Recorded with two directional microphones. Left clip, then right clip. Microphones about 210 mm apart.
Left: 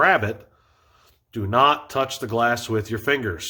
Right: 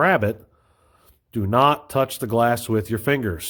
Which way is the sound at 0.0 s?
50° right (ahead or behind).